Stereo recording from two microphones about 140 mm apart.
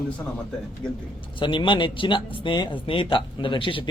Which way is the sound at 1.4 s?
35° left (ahead or behind).